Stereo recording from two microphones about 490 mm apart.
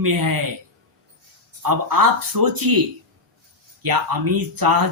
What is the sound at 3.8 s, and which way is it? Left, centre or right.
Speech, right.